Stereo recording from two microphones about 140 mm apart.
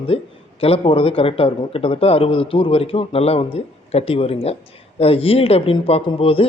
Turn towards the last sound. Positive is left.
turn(degrees=40)  # may be behind; listen again after turning